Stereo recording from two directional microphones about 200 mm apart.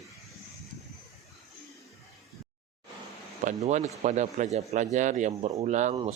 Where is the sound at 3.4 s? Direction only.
35° right (ahead or behind).